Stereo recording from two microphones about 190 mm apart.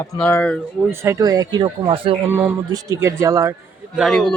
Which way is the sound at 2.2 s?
10° right (ahead or behind).